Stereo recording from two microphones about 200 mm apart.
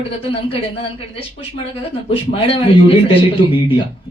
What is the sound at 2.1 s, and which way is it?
Speech, 30° left (ahead or behind).